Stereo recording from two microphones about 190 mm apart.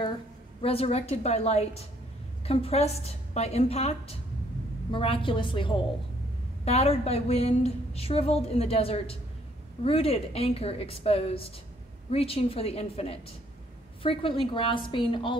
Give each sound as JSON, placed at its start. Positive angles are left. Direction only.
{"t": 0.6, "sound": "a woman's voice", "side_deg": 30}